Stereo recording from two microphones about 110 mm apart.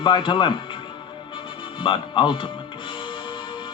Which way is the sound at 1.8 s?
45° left (ahead or behind).